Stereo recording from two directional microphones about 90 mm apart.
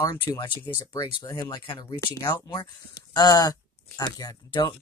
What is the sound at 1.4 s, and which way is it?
Speech, 55° left (ahead or behind).